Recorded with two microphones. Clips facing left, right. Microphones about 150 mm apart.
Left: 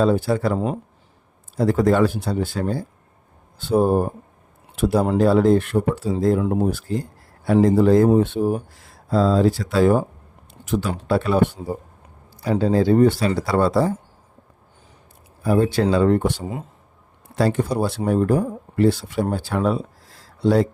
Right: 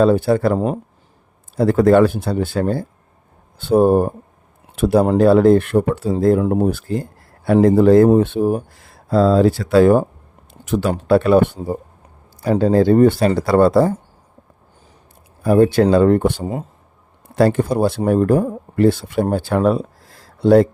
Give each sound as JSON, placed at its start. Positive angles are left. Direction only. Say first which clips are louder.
{"t": 0.0, "sound": "speech", "louder": "right 5 dB", "side_deg": -60}
{"t": 1.5, "sound": "speech", "louder": "right 5 dB", "side_deg": -60}
{"t": 15.4, "sound": "speech", "louder": "right 6 dB", "side_deg": -55}
{"t": 17.3, "sound": "speech", "louder": "right 5 dB", "side_deg": -55}